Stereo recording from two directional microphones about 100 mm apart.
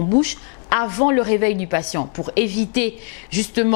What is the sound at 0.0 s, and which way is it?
Speech, 15° left (ahead or behind).